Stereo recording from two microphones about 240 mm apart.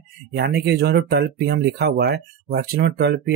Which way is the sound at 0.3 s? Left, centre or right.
Right.